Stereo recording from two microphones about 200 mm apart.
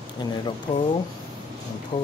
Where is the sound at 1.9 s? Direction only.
25° left (ahead or behind).